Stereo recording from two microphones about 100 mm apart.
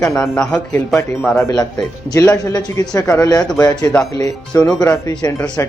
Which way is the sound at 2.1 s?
40° left (ahead or behind).